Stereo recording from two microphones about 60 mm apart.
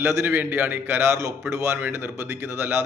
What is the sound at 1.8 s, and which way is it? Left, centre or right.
A man's voice, right.